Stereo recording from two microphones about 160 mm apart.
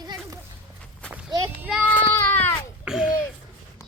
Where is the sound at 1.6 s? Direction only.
5° right (ahead or behind).